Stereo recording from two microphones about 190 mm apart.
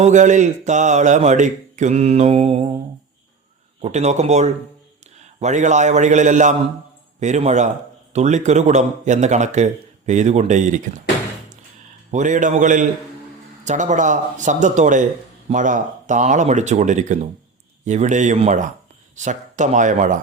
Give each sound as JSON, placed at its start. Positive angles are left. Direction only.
{"t": 0.0, "sound": "speech", "side_deg": -40}
{"t": 3.8, "sound": "speech", "side_deg": -35}
{"t": 12.1, "sound": "speech", "side_deg": -40}